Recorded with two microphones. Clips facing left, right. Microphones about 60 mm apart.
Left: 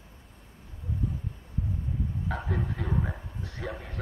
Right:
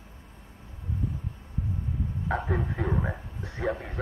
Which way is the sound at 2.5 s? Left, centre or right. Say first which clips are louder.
Right 2 dB; right.